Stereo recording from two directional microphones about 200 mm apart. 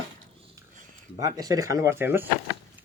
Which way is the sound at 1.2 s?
15° right (ahead or behind).